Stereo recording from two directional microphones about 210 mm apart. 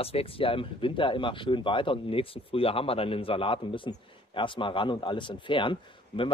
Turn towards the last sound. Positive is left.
turn(degrees=25)  # may be behind; listen again after turning